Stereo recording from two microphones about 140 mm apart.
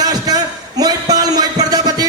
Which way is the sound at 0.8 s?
30° right (ahead or behind).